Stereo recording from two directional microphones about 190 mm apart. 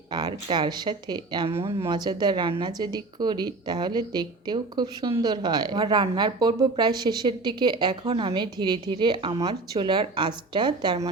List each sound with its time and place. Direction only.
0.1 s speech: 20° right (ahead or behind)